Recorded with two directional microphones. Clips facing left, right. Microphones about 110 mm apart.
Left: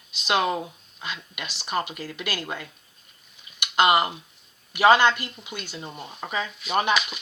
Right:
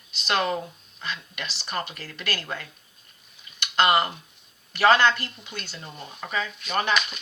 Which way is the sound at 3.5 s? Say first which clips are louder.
Left 1 dB; 15° left (ahead or behind).